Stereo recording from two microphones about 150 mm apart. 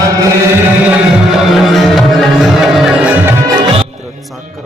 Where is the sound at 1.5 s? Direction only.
Centre (ahead or behind).